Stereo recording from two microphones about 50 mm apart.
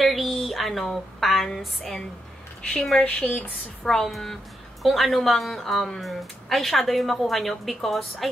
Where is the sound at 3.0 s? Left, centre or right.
Left.